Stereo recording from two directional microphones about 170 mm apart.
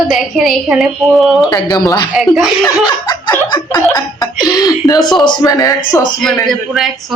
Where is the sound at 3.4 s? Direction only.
25° left (ahead or behind).